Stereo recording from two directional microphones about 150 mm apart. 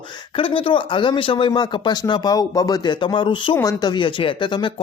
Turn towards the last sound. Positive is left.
turn(degrees=30)  # may be behind; listen again after turning